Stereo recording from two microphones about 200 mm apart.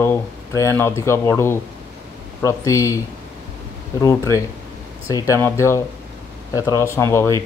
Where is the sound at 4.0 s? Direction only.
15° left (ahead or behind).